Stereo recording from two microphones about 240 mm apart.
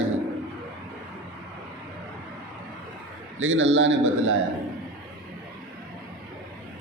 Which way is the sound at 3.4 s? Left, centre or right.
Right.